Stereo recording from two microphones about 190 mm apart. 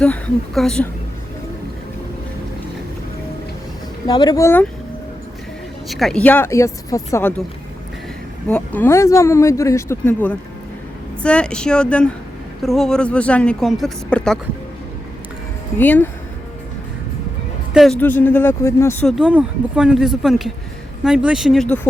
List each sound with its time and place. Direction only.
0.0 s speech: 5° left (ahead or behind)
4.0 s speech: 20° left (ahead or behind)
5.9 s speech: centre (ahead or behind)
8.4 s speech: 5° left (ahead or behind)
15.8 s speech: 10° left (ahead or behind)
17.7 s speech: 5° left (ahead or behind)
19.0 s speech: 5° right (ahead or behind)